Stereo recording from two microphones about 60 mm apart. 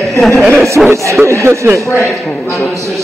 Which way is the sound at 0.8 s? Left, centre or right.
Centre.